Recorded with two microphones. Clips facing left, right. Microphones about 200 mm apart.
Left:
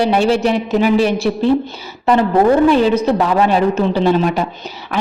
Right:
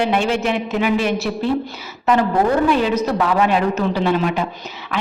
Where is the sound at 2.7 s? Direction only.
30° left (ahead or behind).